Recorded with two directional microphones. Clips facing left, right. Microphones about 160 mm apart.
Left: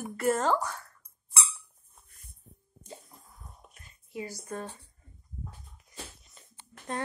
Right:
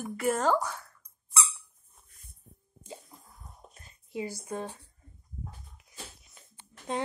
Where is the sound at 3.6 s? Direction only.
30° right (ahead or behind).